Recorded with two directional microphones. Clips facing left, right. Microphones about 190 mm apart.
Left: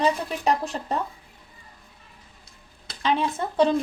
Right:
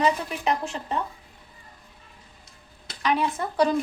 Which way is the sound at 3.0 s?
25° left (ahead or behind).